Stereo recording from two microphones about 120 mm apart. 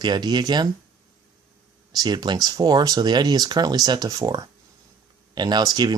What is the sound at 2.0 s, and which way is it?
Speech, 35° right (ahead or behind).